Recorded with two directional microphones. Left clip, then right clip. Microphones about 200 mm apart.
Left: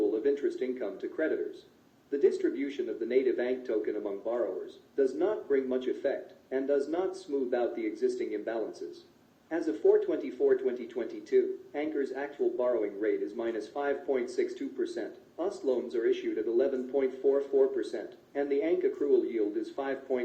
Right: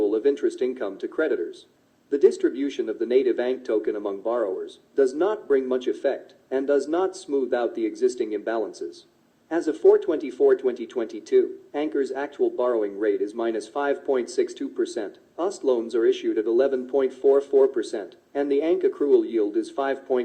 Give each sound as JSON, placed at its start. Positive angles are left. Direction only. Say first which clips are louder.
{"t": 0.1, "sound": "speech", "louder": "right 7 dB", "side_deg": -45}